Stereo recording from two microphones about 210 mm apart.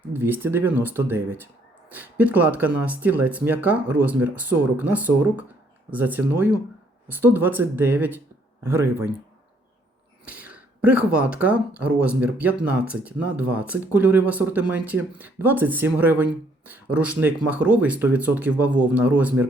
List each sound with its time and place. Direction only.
0.1 s speech: 10° right (ahead or behind)
10.2 s speech: 5° right (ahead or behind)